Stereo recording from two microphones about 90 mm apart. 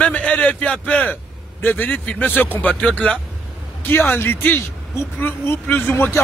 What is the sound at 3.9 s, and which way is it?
Speech, 25° left (ahead or behind).